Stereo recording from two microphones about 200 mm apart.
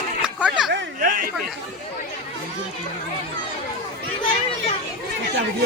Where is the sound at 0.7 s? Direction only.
45° right (ahead or behind).